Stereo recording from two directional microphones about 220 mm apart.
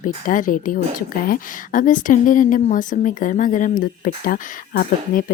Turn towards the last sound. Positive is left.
turn(degrees=40)  # may be behind; listen again after turning